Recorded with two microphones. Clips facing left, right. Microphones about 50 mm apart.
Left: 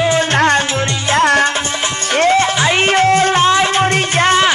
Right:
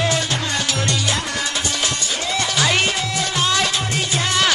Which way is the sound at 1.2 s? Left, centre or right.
Left.